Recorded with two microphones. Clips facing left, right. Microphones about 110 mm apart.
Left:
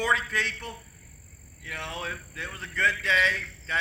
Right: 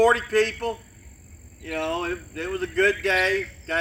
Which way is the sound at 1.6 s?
60° right (ahead or behind).